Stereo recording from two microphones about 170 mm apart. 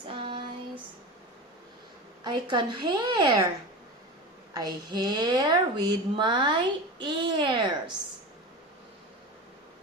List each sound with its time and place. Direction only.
0.1 s female singing: 30° right (ahead or behind)
2.2 s a woman's voice: 25° right (ahead or behind)
4.5 s a woman's voice: 25° right (ahead or behind)